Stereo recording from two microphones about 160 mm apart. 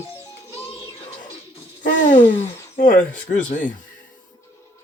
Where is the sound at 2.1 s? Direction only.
50° left (ahead or behind).